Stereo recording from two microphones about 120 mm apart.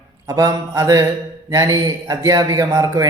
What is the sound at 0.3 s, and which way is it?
A man's voice, 25° right (ahead or behind).